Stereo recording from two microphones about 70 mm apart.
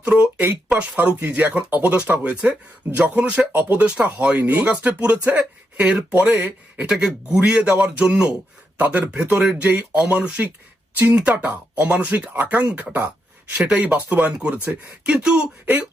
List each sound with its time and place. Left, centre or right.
0.0 s a man's voice: centre
6.3 s speech: right
6.8 s a man's voice: centre
13.5 s a man's voice: centre